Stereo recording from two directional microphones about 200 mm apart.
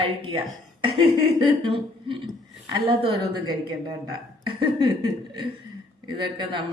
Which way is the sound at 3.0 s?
25° right (ahead or behind).